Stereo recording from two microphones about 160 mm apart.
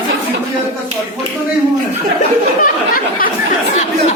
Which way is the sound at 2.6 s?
60° left (ahead or behind).